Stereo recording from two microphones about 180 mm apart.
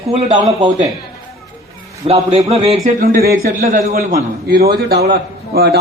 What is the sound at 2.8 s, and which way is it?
Speech, 55° right (ahead or behind).